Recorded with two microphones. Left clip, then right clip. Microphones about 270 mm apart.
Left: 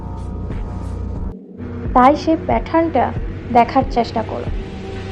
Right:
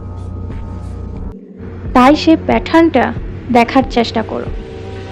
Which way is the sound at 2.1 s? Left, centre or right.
Right.